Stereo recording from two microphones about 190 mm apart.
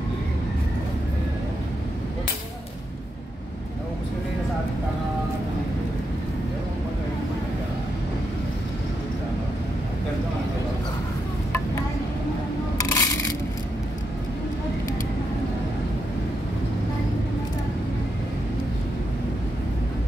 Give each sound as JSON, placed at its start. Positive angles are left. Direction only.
{"t": 12.8, "sound": "coin", "side_deg": 15}